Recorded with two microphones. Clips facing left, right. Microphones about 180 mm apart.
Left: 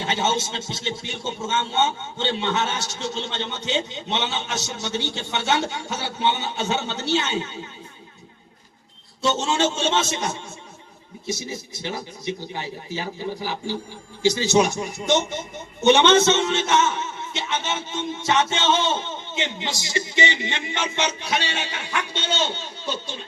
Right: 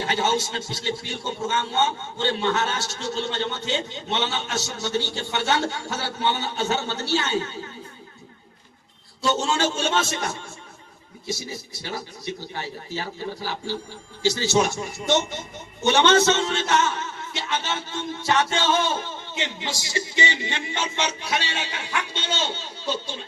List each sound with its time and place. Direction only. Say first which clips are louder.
0.1 s a man's voice: even; 20° left (ahead or behind)
9.2 s a man's voice: left 1 dB; 20° left (ahead or behind)